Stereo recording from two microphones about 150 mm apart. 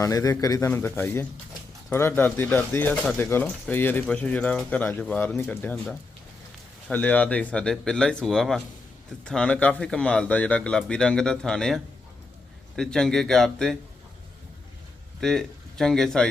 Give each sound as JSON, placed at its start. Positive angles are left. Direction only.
{"t": 0.0, "sound": "a man's voice", "side_deg": 25}
{"t": 15.2, "sound": "speech", "side_deg": 5}